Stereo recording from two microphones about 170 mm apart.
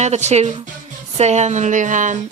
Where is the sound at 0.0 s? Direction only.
40° right (ahead or behind).